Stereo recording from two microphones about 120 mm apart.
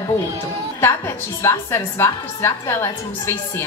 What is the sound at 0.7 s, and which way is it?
A woman's voice, 25° left (ahead or behind).